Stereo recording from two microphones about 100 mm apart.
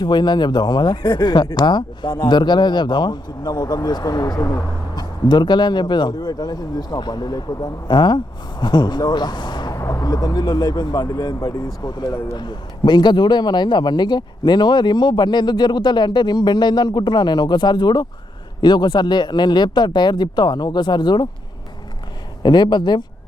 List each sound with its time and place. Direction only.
0.0 s speech: 50° left (ahead or behind)
5.3 s speech: 50° left (ahead or behind)
9.7 s speech: 30° left (ahead or behind); by 21.2 s 45° left (ahead or behind)
22.4 s speech: 45° left (ahead or behind)